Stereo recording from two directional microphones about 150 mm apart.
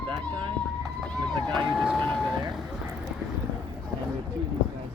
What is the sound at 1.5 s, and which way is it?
Speech, centre (ahead or behind).